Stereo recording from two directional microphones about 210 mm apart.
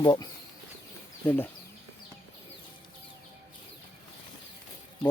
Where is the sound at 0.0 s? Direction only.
20° left (ahead or behind).